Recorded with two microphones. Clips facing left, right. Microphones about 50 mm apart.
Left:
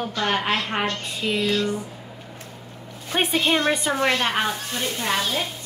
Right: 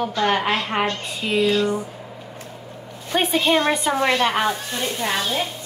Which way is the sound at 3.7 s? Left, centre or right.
Centre.